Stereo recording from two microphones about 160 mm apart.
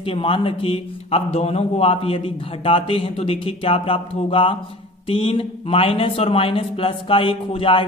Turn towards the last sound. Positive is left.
turn(degrees=35)  # may be behind; listen again after turning